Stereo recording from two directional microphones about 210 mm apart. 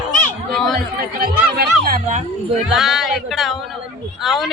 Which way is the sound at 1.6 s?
45° right (ahead or behind).